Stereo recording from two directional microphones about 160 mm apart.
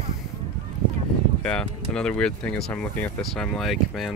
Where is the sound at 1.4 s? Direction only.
5° left (ahead or behind).